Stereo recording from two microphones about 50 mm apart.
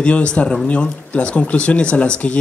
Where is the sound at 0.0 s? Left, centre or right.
Left.